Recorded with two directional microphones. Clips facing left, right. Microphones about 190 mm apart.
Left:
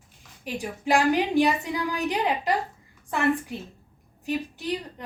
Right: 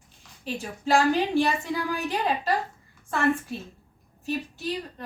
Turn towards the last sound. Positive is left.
turn(degrees=15)  # may be behind; listen again after turning